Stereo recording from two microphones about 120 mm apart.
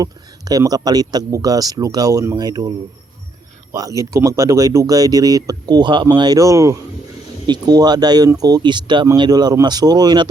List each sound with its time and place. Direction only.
0.0 s speech: 30° right (ahead or behind)
7.4 s speech: 35° right (ahead or behind)